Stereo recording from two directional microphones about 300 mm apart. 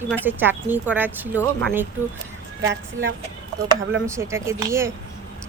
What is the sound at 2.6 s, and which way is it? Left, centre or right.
Speech, right.